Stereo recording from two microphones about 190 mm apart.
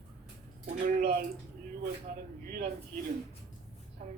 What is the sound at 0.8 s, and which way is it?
Speech, 50° right (ahead or behind).